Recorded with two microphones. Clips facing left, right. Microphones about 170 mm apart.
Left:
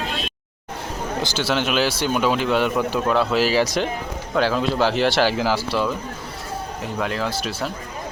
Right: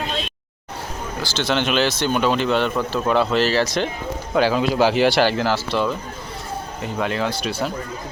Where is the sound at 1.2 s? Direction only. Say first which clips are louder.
Even; 15° left (ahead or behind).